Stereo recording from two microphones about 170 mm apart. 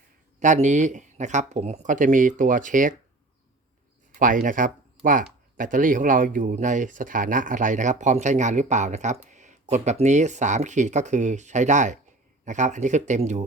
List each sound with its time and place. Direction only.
0.3 s speech: 45° right (ahead or behind)
4.2 s speech: 50° right (ahead or behind)